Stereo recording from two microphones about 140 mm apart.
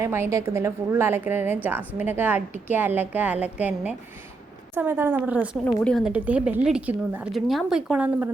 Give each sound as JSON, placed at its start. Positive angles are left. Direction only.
{"t": 0.0, "sound": "a woman's voice", "side_deg": -20}
{"t": 5.6, "sound": "speech", "side_deg": 5}
{"t": 6.1, "sound": "a woman's voice", "side_deg": -10}